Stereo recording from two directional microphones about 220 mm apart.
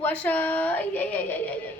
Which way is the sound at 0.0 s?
10° left (ahead or behind).